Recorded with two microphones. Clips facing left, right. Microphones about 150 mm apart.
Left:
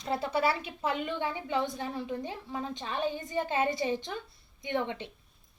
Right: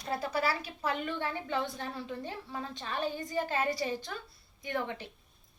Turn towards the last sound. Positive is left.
turn(degrees=20)  # may be behind; listen again after turning